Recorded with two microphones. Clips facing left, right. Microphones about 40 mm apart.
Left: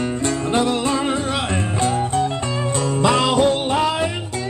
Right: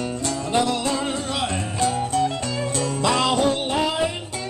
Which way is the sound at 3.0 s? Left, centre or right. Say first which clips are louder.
Left 4 dB; centre.